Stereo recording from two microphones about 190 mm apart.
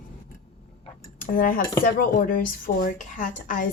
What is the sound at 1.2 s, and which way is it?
A woman's voice, 45° left (ahead or behind).